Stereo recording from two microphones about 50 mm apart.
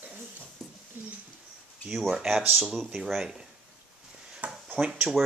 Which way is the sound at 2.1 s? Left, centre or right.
Centre.